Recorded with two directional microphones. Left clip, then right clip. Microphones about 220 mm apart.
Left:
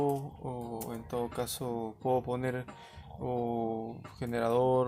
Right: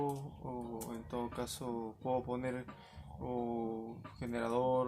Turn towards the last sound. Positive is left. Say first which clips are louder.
# left 6 dB
turn(degrees=45)  # may be behind; listen again after turning